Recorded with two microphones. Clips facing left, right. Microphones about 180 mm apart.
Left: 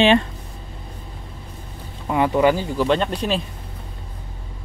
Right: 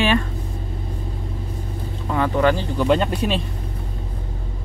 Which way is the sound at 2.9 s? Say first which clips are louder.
Right 3 dB; 5° right (ahead or behind).